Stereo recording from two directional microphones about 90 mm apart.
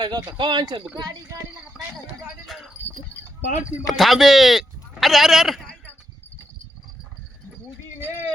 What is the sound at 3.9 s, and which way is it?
Speech, centre (ahead or behind).